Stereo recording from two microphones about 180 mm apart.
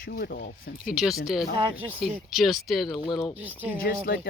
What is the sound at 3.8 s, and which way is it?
Speech, 55° left (ahead or behind).